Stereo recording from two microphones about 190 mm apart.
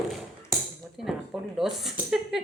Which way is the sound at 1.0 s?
Centre (ahead or behind).